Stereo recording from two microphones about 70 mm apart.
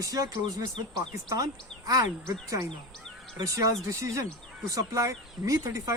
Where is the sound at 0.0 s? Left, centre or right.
Right.